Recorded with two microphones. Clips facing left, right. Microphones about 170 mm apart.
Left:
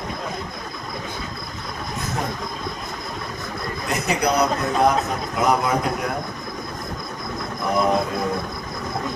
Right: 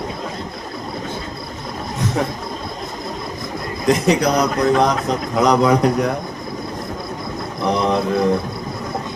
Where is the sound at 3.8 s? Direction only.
90° right.